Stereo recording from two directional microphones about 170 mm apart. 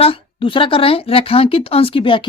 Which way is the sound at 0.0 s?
30° left (ahead or behind).